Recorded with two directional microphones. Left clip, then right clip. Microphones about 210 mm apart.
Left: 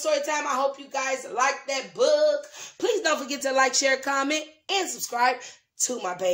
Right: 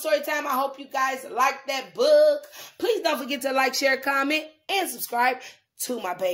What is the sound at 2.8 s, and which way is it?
Speech, 25° right (ahead or behind).